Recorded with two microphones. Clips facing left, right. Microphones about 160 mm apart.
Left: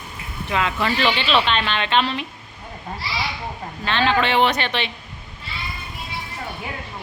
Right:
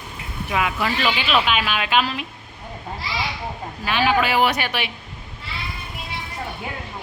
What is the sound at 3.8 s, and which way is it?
A man's voice, 10° right (ahead or behind).